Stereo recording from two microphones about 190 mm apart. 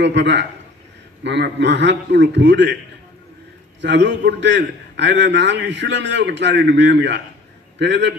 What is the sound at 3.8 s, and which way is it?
A man's voice, 70° right (ahead or behind).